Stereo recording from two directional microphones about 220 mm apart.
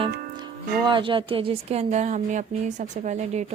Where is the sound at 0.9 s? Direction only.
20° right (ahead or behind).